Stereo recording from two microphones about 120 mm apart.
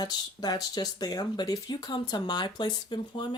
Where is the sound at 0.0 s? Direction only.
35° left (ahead or behind).